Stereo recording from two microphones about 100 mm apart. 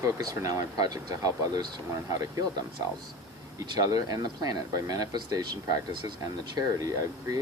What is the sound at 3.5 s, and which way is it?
Speech, 35° right (ahead or behind).